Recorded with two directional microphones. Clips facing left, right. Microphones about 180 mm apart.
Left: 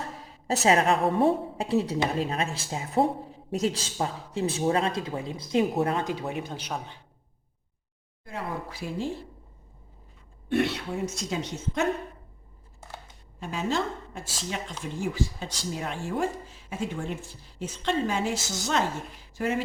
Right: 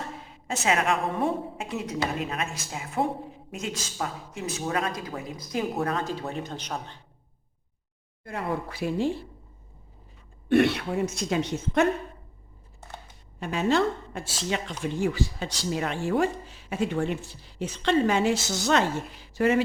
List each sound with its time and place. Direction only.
0.3 s a woman's voice: 35° left (ahead or behind); by 7.0 s 10° left (ahead or behind)
8.2 s speech: 60° right (ahead or behind)
10.5 s speech: 65° right (ahead or behind)
13.4 s speech: 70° right (ahead or behind)